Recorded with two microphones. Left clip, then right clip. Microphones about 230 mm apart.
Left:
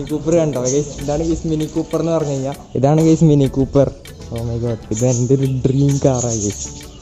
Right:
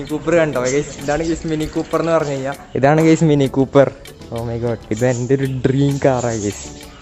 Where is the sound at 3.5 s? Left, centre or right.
Right.